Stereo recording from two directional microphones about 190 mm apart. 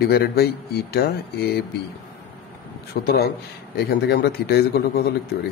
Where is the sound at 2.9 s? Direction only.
55° left (ahead or behind).